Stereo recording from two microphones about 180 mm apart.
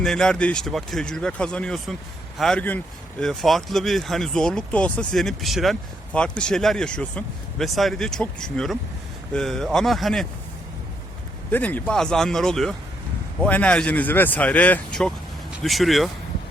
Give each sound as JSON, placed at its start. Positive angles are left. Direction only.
{"t": 0.0, "sound": "speech", "side_deg": 5}
{"t": 11.5, "sound": "speech", "side_deg": 10}